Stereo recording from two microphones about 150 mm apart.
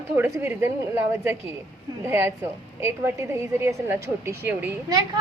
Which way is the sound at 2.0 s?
15° right (ahead or behind).